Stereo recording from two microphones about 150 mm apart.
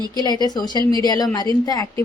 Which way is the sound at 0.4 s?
25° left (ahead or behind).